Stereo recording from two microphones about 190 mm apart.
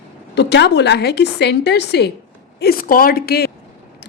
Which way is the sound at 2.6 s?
50° left (ahead or behind).